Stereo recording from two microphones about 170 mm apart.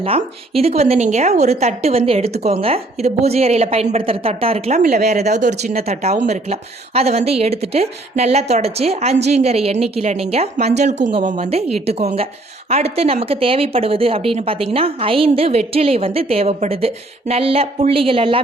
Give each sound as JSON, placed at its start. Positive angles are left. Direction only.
{"t": 0.0, "sound": "speech", "side_deg": -35}